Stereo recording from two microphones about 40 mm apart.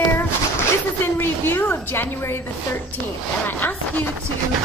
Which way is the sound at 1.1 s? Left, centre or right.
Left.